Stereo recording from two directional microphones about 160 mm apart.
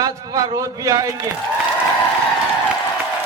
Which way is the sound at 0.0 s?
25° right (ahead or behind).